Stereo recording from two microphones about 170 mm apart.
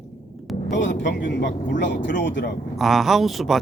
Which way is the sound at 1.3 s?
80° left.